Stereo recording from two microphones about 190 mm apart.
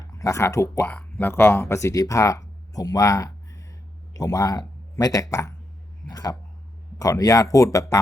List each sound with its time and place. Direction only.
0.0 s speech: 20° left (ahead or behind)